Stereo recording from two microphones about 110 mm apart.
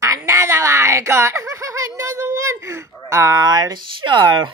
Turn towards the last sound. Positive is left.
turn(degrees=-45)  # may be behind; listen again after turning